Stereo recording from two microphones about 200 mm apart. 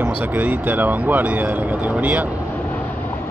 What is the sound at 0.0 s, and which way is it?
Speech, 10° right (ahead or behind).